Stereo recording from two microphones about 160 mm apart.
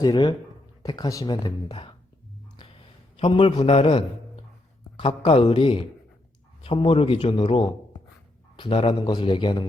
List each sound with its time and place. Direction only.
0.0 s speech: 25° left (ahead or behind)
3.2 s a man's voice: 35° left (ahead or behind)